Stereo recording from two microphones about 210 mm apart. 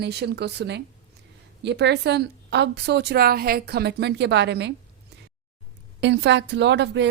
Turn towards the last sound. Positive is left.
turn(degrees=-55)  # may be behind; listen again after turning